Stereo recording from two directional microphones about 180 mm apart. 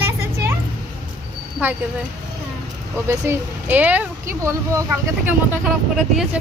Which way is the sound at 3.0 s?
15° right (ahead or behind).